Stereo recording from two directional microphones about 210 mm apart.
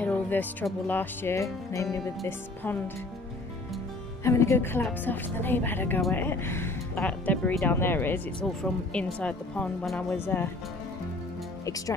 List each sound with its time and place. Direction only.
0.0 s a woman's voice: 5° left (ahead or behind)
4.2 s a woman's voice: 15° left (ahead or behind)
11.6 s speech: 15° left (ahead or behind)